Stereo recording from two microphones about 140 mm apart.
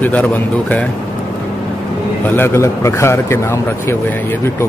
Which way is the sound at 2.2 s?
15° left (ahead or behind).